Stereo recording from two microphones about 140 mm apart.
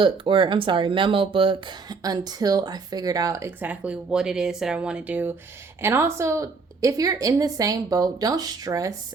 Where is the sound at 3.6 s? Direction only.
10° right (ahead or behind).